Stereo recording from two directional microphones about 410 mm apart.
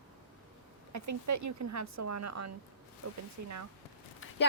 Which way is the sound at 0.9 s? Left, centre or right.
Right.